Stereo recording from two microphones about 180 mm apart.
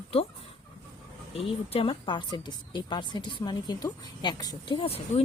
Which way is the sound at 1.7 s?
30° left (ahead or behind).